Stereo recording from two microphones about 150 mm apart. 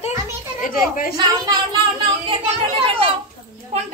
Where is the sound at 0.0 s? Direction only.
55° left (ahead or behind).